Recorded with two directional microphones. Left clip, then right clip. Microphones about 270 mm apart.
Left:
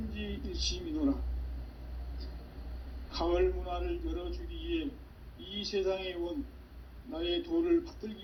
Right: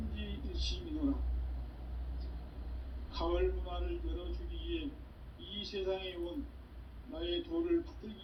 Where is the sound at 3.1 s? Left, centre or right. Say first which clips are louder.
Left 5 dB; left.